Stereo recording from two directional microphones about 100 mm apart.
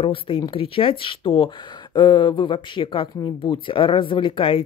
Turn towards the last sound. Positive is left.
turn(degrees=65)  # may be behind; listen again after turning